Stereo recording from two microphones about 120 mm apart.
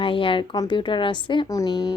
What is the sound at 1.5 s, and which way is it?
Speech, 30° left (ahead or behind).